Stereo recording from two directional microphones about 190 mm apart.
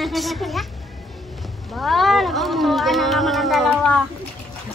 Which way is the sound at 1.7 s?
Centre (ahead or behind).